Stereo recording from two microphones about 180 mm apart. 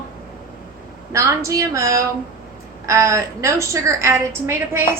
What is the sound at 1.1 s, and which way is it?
A woman's voice, 15° right (ahead or behind).